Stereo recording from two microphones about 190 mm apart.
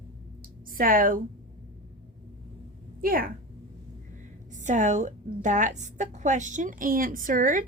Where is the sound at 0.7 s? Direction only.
45° right (ahead or behind).